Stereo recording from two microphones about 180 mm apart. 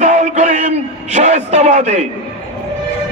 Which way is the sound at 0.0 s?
40° right (ahead or behind).